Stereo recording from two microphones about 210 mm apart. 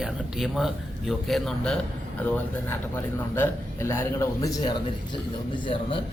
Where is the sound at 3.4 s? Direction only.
10° left (ahead or behind).